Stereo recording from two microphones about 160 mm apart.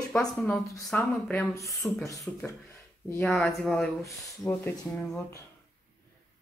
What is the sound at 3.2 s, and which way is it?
Speech, 5° left (ahead or behind).